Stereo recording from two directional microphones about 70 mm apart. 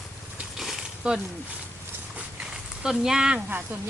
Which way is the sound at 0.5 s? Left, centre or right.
Centre.